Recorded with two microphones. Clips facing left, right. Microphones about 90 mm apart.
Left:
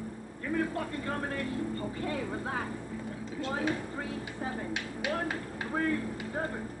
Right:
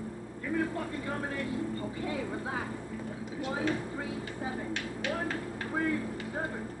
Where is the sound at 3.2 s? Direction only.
15° right (ahead or behind).